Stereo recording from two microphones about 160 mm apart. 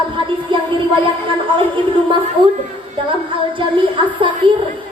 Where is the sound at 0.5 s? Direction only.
30° right (ahead or behind).